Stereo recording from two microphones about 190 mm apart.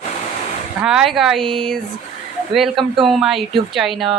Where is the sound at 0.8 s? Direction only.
5° right (ahead or behind).